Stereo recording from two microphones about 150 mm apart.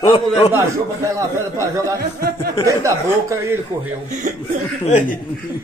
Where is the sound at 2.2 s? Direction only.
90° right.